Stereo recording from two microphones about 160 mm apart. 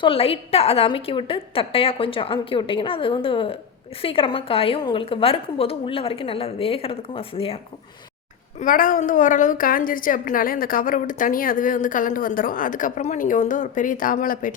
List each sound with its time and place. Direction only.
0.0 s a woman's voice: 35° left (ahead or behind)
8.5 s a woman's voice: 55° left (ahead or behind)